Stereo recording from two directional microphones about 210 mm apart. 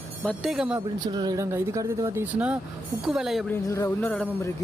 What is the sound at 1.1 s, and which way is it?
Speech, 20° right (ahead or behind).